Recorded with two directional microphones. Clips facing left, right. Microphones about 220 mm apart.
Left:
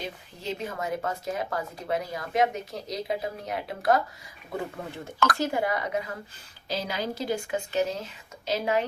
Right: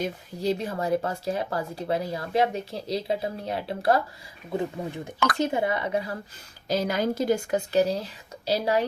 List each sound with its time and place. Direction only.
0.0 s speech: 35° right (ahead or behind)
5.4 s a woman's voice: 20° right (ahead or behind)
6.7 s speech: 45° right (ahead or behind)